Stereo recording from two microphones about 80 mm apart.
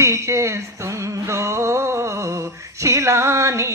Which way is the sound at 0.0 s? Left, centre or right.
Right.